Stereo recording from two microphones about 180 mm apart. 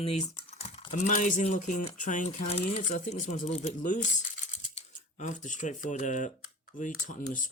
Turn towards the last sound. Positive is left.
turn(degrees=45)  # may be behind; listen again after turning